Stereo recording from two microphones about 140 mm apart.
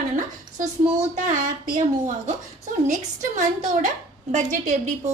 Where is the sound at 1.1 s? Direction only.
60° right (ahead or behind).